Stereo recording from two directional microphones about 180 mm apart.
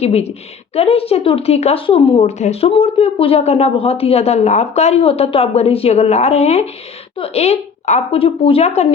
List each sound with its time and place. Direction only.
0.0 s speech: 35° left (ahead or behind)